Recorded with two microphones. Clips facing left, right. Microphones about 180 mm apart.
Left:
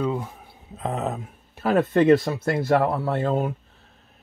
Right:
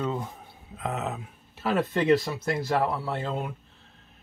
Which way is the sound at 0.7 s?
35° left (ahead or behind).